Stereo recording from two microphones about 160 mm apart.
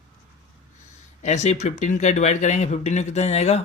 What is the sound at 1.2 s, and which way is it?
Speech, 45° left (ahead or behind).